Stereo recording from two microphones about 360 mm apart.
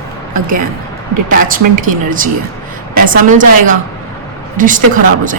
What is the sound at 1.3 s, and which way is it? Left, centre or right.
Speech, right.